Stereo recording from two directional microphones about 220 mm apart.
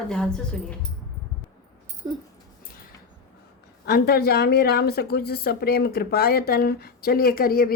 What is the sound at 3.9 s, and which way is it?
A woman's voice, 45° left (ahead or behind).